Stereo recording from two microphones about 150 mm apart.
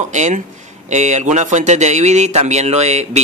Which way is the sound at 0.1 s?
50° right (ahead or behind).